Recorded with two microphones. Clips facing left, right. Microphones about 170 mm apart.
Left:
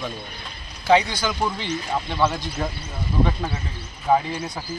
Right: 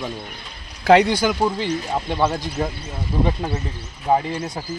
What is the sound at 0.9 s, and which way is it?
Speech, 70° right (ahead or behind).